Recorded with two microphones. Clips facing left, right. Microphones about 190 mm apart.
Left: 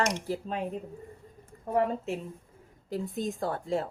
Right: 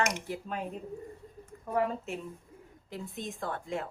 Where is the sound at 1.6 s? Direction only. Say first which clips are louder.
Left 3 dB; 30° left (ahead or behind).